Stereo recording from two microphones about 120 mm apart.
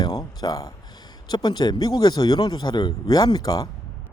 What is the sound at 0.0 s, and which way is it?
Speech, 35° left (ahead or behind).